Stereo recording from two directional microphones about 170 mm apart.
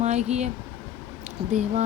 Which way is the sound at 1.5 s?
40° right (ahead or behind).